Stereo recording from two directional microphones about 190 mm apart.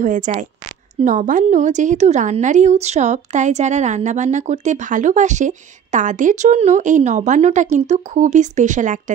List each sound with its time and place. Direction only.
0.0 s a woman's voice: 45° right (ahead or behind)